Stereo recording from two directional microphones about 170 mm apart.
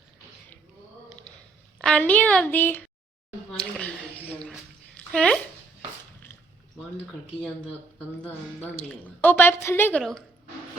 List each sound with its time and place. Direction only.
1.8 s a woman's voice: 5° left (ahead or behind)
3.6 s a sound: 5° left (ahead or behind)
5.1 s speech: 5° left (ahead or behind)
7.9 s a woman's voice: 10° left (ahead or behind)